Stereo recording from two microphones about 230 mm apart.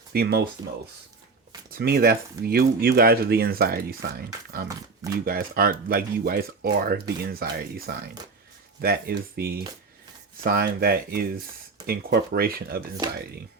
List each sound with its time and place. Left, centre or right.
0.1 s speech: right
1.7 s speech: right